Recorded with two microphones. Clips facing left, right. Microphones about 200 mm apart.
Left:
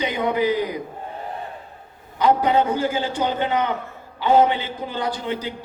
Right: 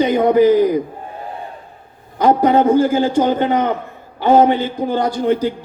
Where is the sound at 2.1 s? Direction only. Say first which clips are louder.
Right 5 dB; 45° right (ahead or behind).